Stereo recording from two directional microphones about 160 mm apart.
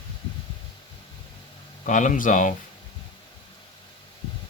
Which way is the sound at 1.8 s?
50° left (ahead or behind).